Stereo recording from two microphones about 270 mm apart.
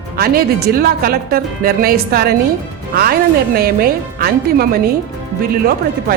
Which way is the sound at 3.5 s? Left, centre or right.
Right.